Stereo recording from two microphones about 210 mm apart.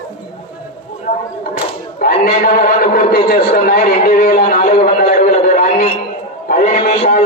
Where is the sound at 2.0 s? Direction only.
45° left (ahead or behind).